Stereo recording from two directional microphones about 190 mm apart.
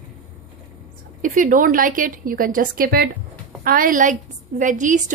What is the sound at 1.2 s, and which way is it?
A woman's voice, 45° right (ahead or behind).